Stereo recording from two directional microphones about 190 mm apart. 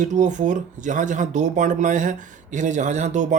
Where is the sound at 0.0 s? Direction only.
40° right (ahead or behind).